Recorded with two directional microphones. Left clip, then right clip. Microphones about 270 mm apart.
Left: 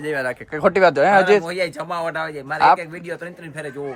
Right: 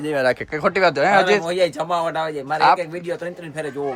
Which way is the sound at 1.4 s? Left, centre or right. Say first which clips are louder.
Right 4 dB; centre.